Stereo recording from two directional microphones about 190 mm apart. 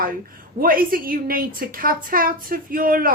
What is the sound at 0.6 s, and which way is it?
Speech, 50° right (ahead or behind).